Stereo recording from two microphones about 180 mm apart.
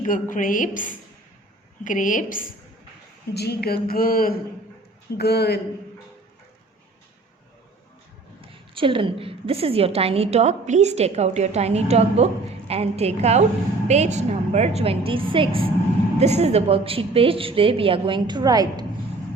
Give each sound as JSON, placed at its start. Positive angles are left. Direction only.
{"t": 0.0, "sound": "a woman's voice", "side_deg": 45}
{"t": 3.3, "sound": "speech", "side_deg": 65}
{"t": 5.1, "sound": "speech", "side_deg": 65}
{"t": 8.4, "sound": "a woman's voice", "side_deg": -30}